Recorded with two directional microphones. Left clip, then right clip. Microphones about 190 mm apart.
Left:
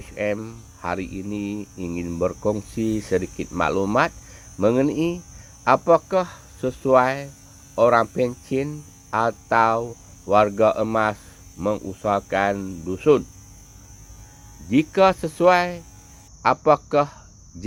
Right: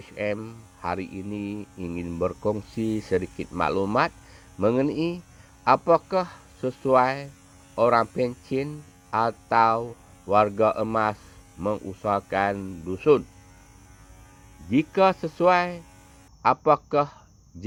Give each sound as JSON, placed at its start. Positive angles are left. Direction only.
{"t": 0.0, "sound": "speech", "side_deg": -25}
{"t": 14.7, "sound": "speech", "side_deg": -25}